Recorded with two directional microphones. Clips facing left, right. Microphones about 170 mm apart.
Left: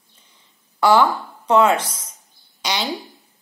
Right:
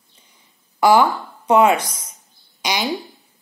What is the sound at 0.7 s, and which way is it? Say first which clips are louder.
Speech: right 1 dB; 10° right (ahead or behind).